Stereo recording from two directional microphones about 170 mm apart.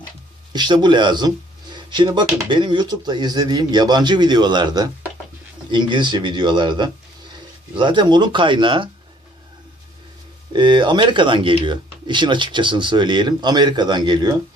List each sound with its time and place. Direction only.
0.5 s speech: 25° right (ahead or behind)
10.5 s speech: 25° right (ahead or behind)